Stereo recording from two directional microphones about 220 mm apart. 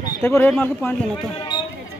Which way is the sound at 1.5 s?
20° left (ahead or behind).